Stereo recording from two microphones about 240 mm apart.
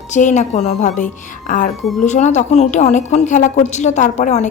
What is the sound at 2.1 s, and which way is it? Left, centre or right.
A woman's voice, left.